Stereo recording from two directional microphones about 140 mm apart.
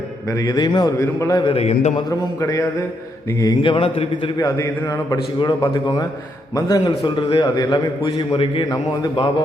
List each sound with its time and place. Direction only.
0.3 s a man's voice: 25° left (ahead or behind)
1.5 s a man's voice: 50° left (ahead or behind)
2.0 s a man's voice: 25° left (ahead or behind)
3.6 s a man's voice: 35° left (ahead or behind)